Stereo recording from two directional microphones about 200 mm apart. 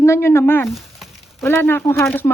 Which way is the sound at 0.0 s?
15° left (ahead or behind).